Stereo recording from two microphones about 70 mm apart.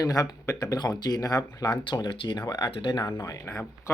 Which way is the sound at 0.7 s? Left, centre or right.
Left.